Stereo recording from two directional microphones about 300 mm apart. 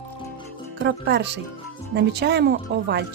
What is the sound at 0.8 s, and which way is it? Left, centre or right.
Speech, right.